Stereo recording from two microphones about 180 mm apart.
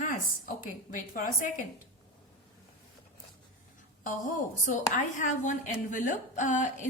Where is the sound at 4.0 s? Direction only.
45° left (ahead or behind).